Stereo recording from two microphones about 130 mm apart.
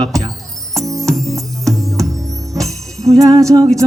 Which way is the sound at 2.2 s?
25° right (ahead or behind).